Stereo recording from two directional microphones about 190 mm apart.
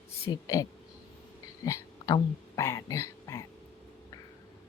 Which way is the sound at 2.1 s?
15° left (ahead or behind).